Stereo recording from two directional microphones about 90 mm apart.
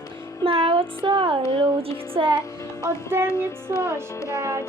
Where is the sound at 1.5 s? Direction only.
90° right.